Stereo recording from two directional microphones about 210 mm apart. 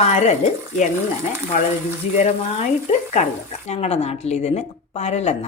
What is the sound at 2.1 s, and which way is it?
Speech, 35° left (ahead or behind).